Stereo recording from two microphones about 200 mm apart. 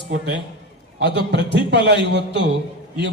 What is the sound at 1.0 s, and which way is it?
A man's voice, 60° right (ahead or behind).